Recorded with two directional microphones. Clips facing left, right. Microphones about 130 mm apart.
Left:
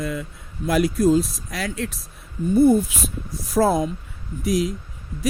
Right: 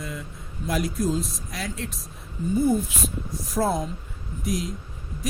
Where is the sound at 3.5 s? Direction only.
90° left.